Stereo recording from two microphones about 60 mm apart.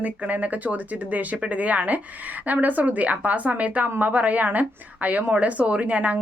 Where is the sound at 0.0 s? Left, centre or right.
Right.